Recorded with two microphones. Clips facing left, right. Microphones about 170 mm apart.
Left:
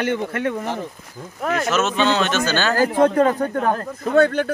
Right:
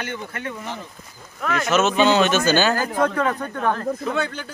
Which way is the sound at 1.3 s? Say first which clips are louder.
Left 2 dB; 40° left (ahead or behind).